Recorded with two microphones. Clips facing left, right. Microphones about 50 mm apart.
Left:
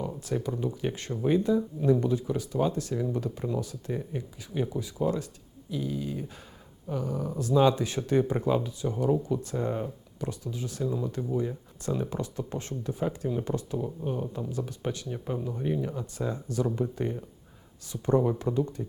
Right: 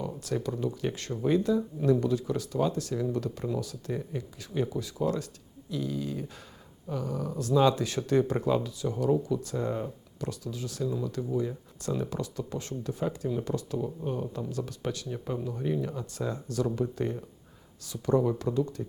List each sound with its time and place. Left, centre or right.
0.0 s a sound: centre
0.5 s speech: centre
3.2 s speech: centre
3.6 s speech: left
8.8 s speech: left
9.6 s speech: centre; by 12.7 s left
12.8 s speech: centre
17.8 s speech: left